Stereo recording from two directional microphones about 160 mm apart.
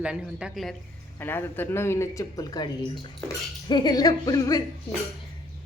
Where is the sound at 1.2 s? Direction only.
15° left (ahead or behind).